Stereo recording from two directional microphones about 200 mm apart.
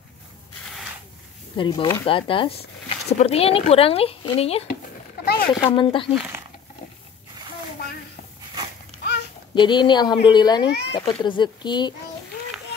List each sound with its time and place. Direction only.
1.6 s speech: 25° left (ahead or behind)
5.2 s a sound: 50° left (ahead or behind)
5.5 s speech: 25° left (ahead or behind)
6.1 s speech: 10° right (ahead or behind)
9.6 s speech: 20° left (ahead or behind)